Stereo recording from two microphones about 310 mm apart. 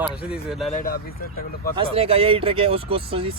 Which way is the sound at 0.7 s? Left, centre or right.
Left.